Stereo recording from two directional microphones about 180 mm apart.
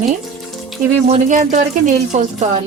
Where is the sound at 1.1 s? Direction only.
40° right (ahead or behind).